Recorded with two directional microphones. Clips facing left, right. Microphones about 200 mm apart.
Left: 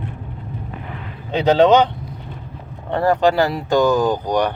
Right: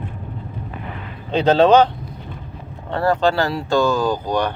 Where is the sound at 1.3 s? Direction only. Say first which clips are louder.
Even; 15° left (ahead or behind).